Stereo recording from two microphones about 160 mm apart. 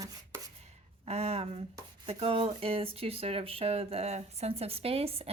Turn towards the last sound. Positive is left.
turn(degrees=-40)  # may be behind; listen again after turning